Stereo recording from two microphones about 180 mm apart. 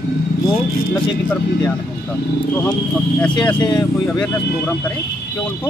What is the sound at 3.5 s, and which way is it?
Speech, 25° left (ahead or behind).